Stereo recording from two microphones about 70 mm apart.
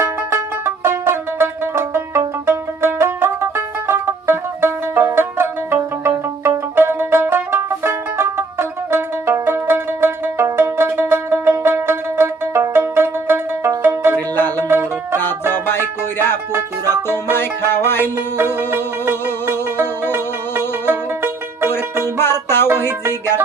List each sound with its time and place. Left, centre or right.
0.0 s music: right
14.3 s music: left
14.7 s music: right
16.1 s music: left
18.7 s music: right
22.0 s music: left